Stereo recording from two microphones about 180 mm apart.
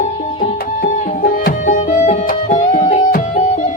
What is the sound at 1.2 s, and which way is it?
Music, 50° left (ahead or behind).